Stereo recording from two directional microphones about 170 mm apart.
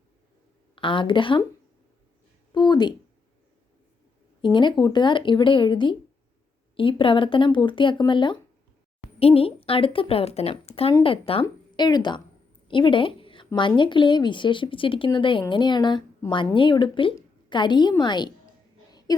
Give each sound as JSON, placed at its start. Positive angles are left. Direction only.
{"t": 0.8, "sound": "speech", "side_deg": 30}
{"t": 2.5, "sound": "a woman's voice", "side_deg": 25}
{"t": 4.4, "sound": "a woman's voice", "side_deg": 30}
{"t": 12.6, "sound": "a sound", "side_deg": 30}
{"t": 13.6, "sound": "speech", "side_deg": 30}
{"t": 18.9, "sound": "a sound", "side_deg": 25}